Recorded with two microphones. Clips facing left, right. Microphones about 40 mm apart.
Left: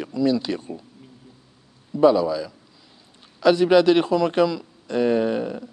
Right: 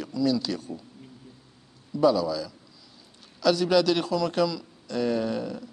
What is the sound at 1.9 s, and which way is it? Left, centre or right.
A man's voice, left.